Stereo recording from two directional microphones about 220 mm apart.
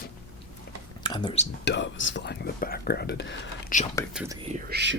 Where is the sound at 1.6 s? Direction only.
55° left (ahead or behind).